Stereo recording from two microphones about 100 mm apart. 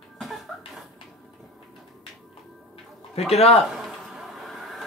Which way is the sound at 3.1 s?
90° left.